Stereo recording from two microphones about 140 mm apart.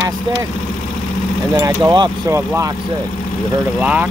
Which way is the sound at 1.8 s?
30° right (ahead or behind).